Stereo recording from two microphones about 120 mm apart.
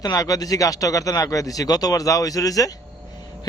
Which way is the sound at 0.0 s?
30° left (ahead or behind).